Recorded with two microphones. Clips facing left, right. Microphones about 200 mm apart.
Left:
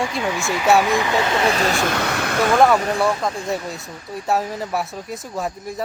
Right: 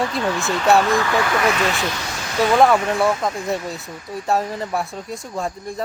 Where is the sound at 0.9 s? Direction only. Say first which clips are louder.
Even; 20° left (ahead or behind); by 2.4 s 65° left (ahead or behind).